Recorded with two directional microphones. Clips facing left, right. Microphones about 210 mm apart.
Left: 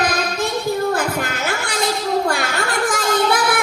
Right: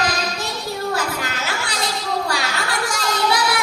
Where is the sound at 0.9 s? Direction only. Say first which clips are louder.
Left 3 dB; 55° left (ahead or behind).